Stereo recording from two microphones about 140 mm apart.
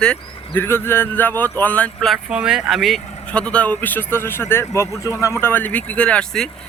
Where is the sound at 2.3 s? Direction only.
5° right (ahead or behind).